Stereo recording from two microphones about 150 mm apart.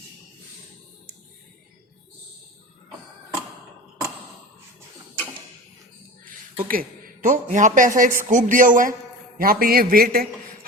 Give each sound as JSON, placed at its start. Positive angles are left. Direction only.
{"t": 6.2, "sound": "a sound", "side_deg": -65}
{"t": 7.9, "sound": "a man's voice", "side_deg": -65}
{"t": 9.4, "sound": "a man's voice", "side_deg": -80}